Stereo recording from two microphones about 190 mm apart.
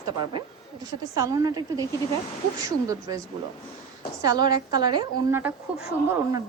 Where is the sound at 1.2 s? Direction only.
20° right (ahead or behind).